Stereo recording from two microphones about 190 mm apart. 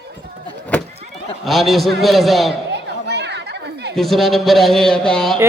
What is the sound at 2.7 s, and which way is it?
Chatter, 65° right (ahead or behind).